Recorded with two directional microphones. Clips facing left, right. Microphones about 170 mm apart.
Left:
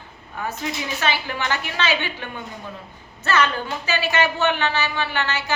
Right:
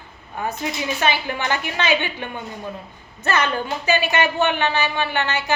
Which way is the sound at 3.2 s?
15° right (ahead or behind).